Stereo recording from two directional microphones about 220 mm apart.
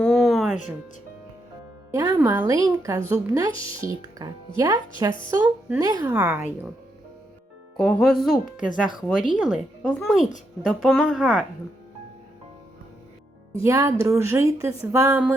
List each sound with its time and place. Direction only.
0.0 s music: centre (ahead or behind)
1.9 s speech: 15° right (ahead or behind)
5.4 s a woman's voice: 5° right (ahead or behind)
5.8 s speech: 15° right (ahead or behind)
7.8 s a woman's voice: centre (ahead or behind)
13.7 s speech: 15° right (ahead or behind)